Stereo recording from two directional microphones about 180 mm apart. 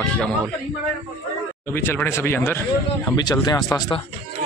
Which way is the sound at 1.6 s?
15° left (ahead or behind).